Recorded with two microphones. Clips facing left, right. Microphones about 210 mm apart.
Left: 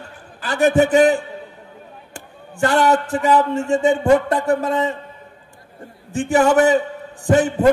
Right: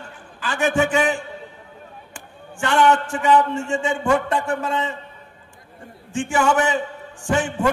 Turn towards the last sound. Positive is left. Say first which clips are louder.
# left 6 dB
turn(degrees=35)  # may be behind; listen again after turning